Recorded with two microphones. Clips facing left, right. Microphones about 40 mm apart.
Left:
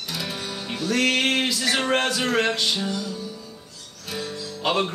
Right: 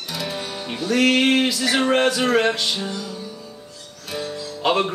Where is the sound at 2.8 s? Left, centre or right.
Centre.